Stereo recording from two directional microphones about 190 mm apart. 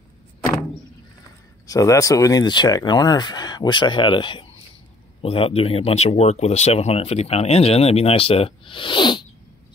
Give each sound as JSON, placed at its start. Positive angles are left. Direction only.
{"t": 1.7, "sound": "speech", "side_deg": 15}